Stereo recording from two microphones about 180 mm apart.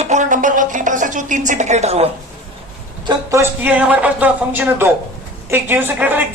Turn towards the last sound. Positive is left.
turn(degrees=-10)  # may be behind; listen again after turning